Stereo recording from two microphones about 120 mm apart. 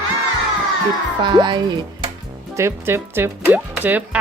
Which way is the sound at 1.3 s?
35° right (ahead or behind).